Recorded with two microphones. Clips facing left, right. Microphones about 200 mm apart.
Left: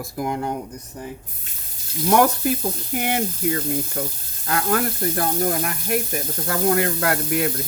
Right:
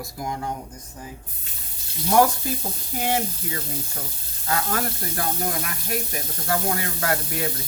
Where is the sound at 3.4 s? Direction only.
85° left.